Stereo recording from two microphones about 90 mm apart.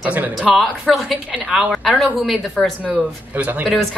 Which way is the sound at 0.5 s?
Centre (ahead or behind).